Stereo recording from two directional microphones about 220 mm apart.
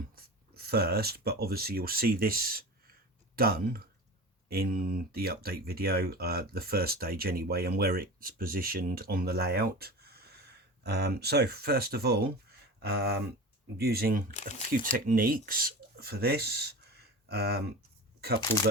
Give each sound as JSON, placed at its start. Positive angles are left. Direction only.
{"t": 0.2, "sound": "speech", "side_deg": -45}